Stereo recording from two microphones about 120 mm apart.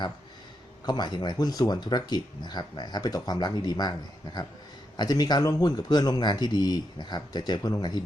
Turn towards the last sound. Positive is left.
turn(degrees=35)  # may be behind; listen again after turning